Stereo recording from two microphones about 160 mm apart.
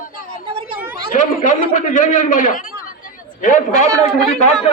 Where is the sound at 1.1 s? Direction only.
50° left (ahead or behind).